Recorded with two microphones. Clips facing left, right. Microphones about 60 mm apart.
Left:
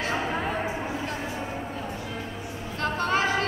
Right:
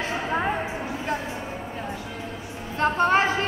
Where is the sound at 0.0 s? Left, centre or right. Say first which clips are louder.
Right 2 dB; right.